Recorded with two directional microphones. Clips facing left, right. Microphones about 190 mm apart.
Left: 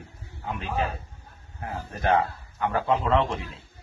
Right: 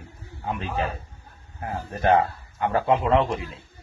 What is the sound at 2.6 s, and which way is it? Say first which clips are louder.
Speech: right 3 dB; 20° right (ahead or behind).